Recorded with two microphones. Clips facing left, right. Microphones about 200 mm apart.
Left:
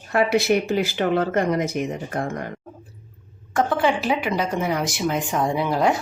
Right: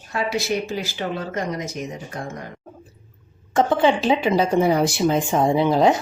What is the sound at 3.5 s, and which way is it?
Speech, 25° right (ahead or behind).